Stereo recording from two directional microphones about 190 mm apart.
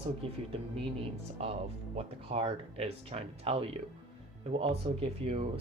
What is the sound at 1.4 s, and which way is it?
Speech, 30° right (ahead or behind).